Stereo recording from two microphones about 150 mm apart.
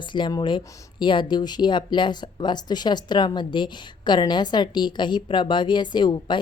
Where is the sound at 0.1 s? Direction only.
30° left (ahead or behind).